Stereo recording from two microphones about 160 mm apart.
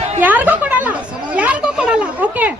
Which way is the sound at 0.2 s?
10° right (ahead or behind).